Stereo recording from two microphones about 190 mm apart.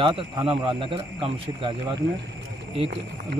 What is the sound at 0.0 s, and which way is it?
Speech, 25° right (ahead or behind).